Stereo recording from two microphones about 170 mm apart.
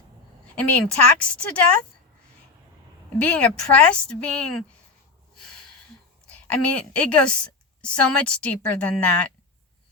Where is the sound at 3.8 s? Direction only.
5° left (ahead or behind).